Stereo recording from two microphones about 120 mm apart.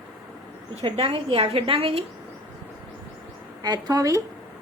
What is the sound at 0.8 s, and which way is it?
A woman's voice, 50° right (ahead or behind).